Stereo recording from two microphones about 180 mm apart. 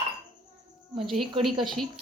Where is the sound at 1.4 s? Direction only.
Centre (ahead or behind).